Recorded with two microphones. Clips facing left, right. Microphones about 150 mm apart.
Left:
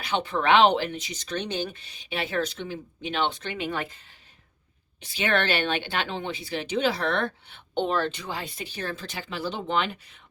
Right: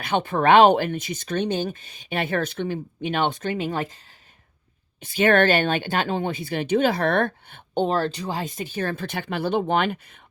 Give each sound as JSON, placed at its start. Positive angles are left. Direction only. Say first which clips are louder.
{"t": 0.0, "sound": "speech", "louder": "right 5 dB", "side_deg": -55}
{"t": 4.9, "sound": "speech", "louder": "right 8 dB", "side_deg": -50}
{"t": 7.7, "sound": "speech", "louder": "right 3 dB", "side_deg": -40}